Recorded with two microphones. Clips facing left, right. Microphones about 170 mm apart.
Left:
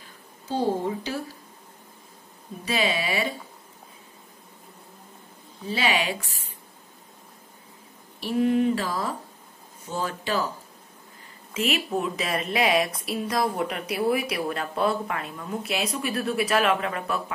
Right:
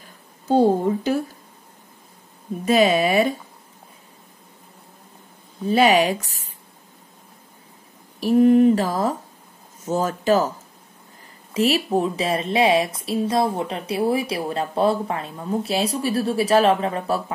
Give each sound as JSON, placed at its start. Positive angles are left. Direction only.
{"t": 0.5, "sound": "speech", "side_deg": -50}
{"t": 2.6, "sound": "speech", "side_deg": -45}
{"t": 5.7, "sound": "a woman's voice", "side_deg": -45}
{"t": 8.2, "sound": "speech", "side_deg": -40}
{"t": 11.5, "sound": "a woman's voice", "side_deg": -35}